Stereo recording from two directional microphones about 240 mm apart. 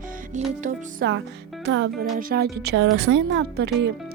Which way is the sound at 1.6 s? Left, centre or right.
Right.